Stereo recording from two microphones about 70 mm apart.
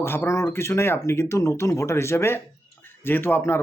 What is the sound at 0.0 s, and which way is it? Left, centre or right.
Speech, left.